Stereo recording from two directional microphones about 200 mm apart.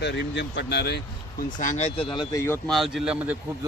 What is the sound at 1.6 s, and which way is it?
Speech, 35° left (ahead or behind).